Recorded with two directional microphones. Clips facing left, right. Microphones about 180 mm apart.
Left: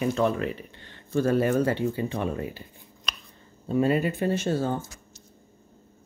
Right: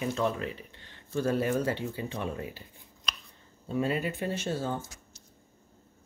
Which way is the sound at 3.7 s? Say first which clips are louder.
Left 6 dB; 50° left (ahead or behind).